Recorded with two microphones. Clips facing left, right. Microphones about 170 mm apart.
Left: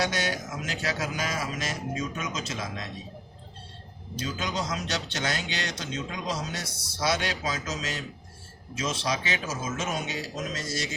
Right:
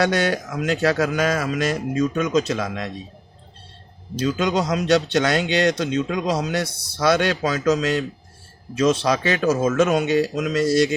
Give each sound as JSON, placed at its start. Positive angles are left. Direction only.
{"t": 0.0, "sound": "speech", "side_deg": -60}
{"t": 4.2, "sound": "speech", "side_deg": -70}